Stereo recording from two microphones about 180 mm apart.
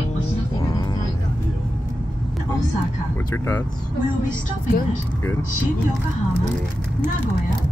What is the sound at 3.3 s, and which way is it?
Speech, 15° left (ahead or behind).